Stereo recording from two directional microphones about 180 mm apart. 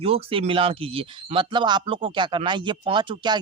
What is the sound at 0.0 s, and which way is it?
Speech, 30° right (ahead or behind).